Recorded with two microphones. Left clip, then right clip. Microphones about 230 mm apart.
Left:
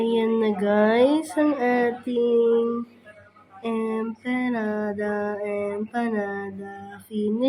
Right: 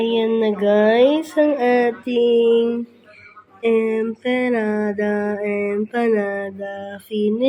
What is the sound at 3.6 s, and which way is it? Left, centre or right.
Mantra, centre.